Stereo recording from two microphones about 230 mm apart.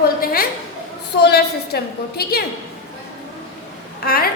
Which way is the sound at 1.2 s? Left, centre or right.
Left.